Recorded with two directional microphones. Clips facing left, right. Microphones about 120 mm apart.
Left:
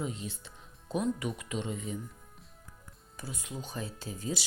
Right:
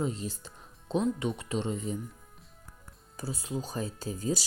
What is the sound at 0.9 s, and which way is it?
Speech, 25° right (ahead or behind).